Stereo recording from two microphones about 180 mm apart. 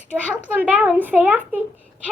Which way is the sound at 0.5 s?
10° right (ahead or behind).